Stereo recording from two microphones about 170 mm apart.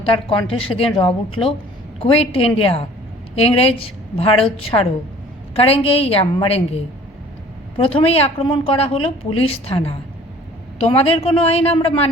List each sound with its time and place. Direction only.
0.0 s a woman's voice: 30° left (ahead or behind)
7.8 s a woman's voice: 35° left (ahead or behind)